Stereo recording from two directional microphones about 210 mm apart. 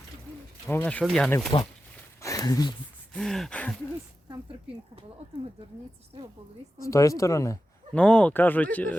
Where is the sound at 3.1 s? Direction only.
Centre (ahead or behind).